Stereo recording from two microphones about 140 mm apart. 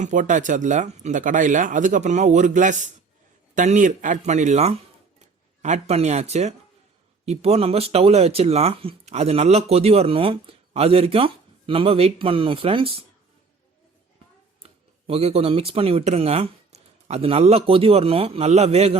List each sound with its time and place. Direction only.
0.0 s speech: 65° right (ahead or behind); by 13.1 s 40° right (ahead or behind)
14.6 s speech: 45° right (ahead or behind)